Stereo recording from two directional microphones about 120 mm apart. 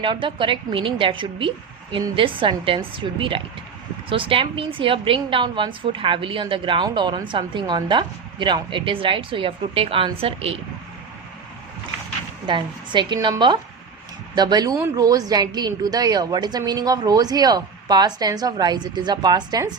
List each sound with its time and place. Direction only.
0.0 s a woman's voice: 45° right (ahead or behind)
12.5 s a woman's voice: 40° right (ahead or behind)